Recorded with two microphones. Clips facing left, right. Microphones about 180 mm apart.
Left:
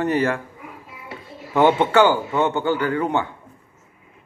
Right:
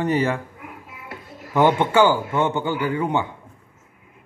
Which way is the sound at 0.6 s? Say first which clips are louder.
Even; centre (ahead or behind).